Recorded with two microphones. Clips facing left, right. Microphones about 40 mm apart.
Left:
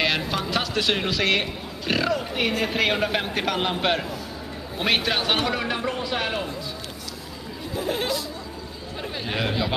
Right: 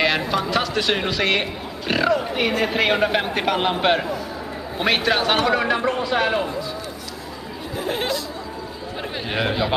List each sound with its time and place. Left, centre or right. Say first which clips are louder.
0.3 s speech: right 4 dB; centre
7.8 s speech: right 2 dB; right
9.3 s speech: right 4 dB; centre